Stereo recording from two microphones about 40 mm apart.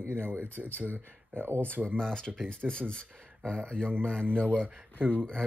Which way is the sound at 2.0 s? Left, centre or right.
Centre.